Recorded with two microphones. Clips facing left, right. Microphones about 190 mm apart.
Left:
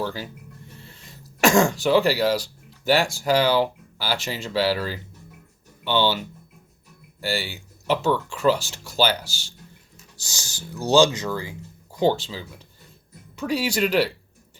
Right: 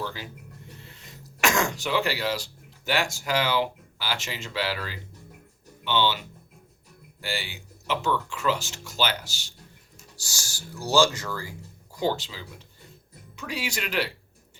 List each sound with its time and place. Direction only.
0.0 s music: 40° left (ahead or behind)
0.9 s speech: 35° left (ahead or behind)
7.2 s speech: 40° left (ahead or behind)
10.2 s speech: 20° left (ahead or behind); by 14.1 s 35° left (ahead or behind)